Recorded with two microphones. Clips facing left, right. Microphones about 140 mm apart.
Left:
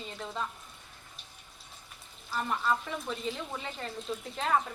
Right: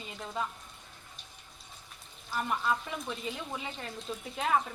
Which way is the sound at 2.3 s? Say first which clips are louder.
Left 1 dB; centre (ahead or behind).